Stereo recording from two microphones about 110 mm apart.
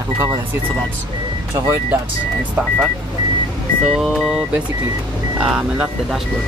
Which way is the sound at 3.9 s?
Centre (ahead or behind).